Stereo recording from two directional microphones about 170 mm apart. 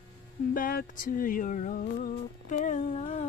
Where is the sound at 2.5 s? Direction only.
45° left (ahead or behind).